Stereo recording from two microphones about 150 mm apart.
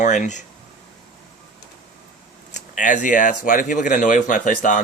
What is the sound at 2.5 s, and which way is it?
Speech, 55° left (ahead or behind).